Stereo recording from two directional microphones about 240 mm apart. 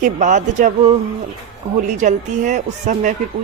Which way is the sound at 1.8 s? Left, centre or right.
Right.